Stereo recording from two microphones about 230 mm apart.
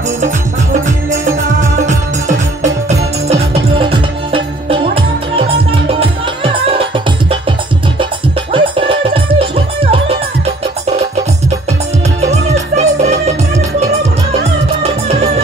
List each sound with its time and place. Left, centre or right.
0.8 s music: right
12.2 s music: right
14.8 s music: right